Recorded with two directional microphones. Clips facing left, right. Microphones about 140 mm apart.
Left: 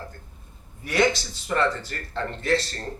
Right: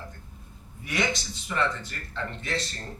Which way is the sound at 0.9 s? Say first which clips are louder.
Left 7 dB; 35° left (ahead or behind).